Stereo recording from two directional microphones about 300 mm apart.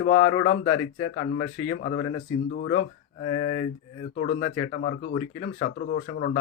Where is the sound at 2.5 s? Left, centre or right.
Left.